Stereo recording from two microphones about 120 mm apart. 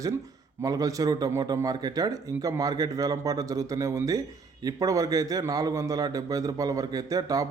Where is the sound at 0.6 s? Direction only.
30° right (ahead or behind).